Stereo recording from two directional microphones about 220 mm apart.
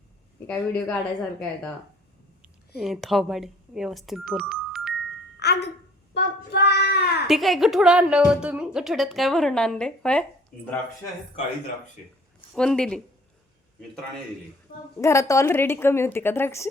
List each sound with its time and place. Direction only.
0.4 s a woman's voice: 5° left (ahead or behind)
5.4 s speech: 50° left (ahead or behind)
6.1 s child singing: 50° left (ahead or behind)
7.3 s a woman's voice: centre (ahead or behind)
12.5 s a woman's voice: 5° left (ahead or behind)
14.9 s a woman's voice: 15° left (ahead or behind)